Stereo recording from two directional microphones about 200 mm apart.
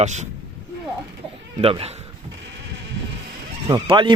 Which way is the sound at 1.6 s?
30° right (ahead or behind).